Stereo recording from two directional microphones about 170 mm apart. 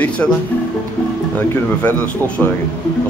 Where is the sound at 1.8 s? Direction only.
10° left (ahead or behind).